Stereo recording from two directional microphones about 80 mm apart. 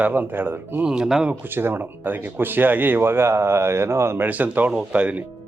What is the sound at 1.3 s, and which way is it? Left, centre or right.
Speech, right.